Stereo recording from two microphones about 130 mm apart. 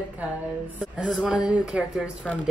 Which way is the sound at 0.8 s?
5° right (ahead or behind).